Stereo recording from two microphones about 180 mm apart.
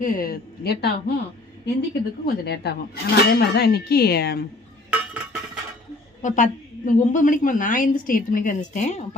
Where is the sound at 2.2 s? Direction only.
65° left (ahead or behind).